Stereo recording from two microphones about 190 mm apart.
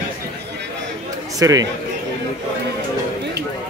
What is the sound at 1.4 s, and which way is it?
Speech, 20° right (ahead or behind).